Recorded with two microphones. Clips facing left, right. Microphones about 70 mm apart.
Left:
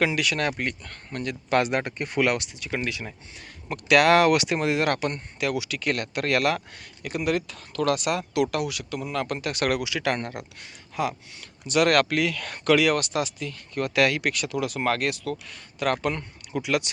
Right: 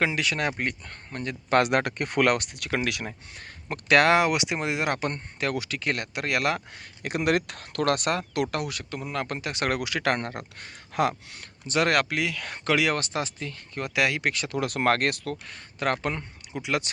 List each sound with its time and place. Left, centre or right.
0.0 s speech: right
1.5 s speech: right
3.3 s speech: right
4.1 s speech: centre
4.9 s speech: right
7.3 s speech: right
9.8 s speech: right
10.9 s speech: right
11.7 s speech: right
14.6 s speech: right